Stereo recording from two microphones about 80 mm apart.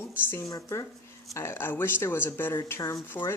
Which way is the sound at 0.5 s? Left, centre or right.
Left.